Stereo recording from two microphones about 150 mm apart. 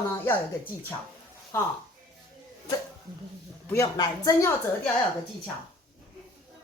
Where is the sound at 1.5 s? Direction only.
15° left (ahead or behind).